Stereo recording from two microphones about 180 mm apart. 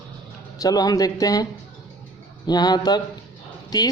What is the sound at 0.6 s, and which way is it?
Speech, 20° left (ahead or behind).